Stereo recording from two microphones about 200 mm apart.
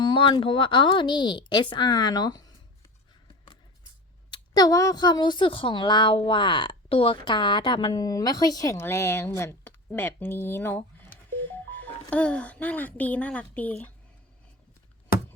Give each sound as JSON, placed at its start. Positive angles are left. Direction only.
{"t": 0.0, "sound": "a woman's voice", "side_deg": 25}
{"t": 4.3, "sound": "a woman's voice", "side_deg": 20}
{"t": 11.4, "sound": "telephone dialing", "side_deg": 10}
{"t": 12.1, "sound": "a woman's voice", "side_deg": 5}